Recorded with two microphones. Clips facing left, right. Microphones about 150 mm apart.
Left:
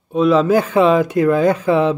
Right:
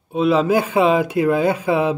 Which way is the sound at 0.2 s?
10° right (ahead or behind).